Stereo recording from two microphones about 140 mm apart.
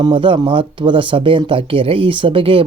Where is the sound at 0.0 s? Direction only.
35° right (ahead or behind).